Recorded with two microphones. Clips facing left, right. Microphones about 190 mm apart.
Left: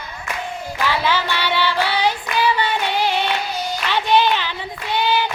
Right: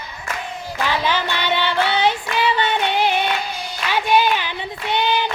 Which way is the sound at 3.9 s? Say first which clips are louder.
Even; 10° right (ahead or behind).